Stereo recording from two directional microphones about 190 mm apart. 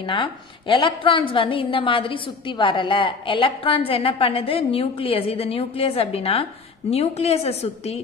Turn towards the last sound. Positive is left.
turn(degrees=35)  # may be behind; listen again after turning